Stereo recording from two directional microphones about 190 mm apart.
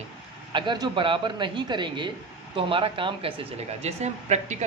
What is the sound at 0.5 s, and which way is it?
Speech, 25° right (ahead or behind).